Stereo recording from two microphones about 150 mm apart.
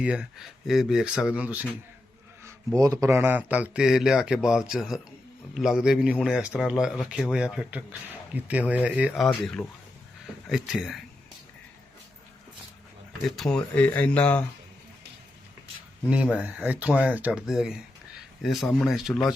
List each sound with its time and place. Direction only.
0.0 s a man's voice: 5° right (ahead or behind)
2.7 s speech: 20° right (ahead or behind)
3.2 s a man's voice: 10° right (ahead or behind)
9.2 s a man's voice: 5° left (ahead or behind)
13.2 s speech: centre (ahead or behind)
16.0 s a man's voice: 5° right (ahead or behind)